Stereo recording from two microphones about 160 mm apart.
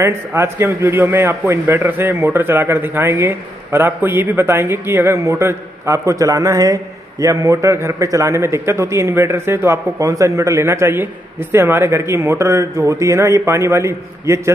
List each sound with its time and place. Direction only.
0.0 s a man's voice: 15° right (ahead or behind)